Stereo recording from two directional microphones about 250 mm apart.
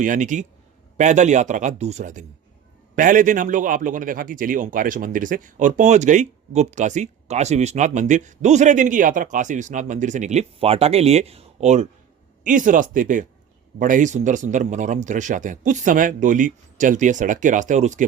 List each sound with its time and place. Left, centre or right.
0.0 s a man's voice: right